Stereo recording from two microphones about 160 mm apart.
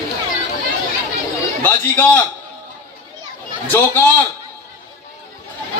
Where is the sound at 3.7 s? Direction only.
10° left (ahead or behind).